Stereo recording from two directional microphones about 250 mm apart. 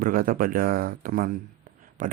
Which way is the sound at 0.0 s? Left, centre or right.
Right.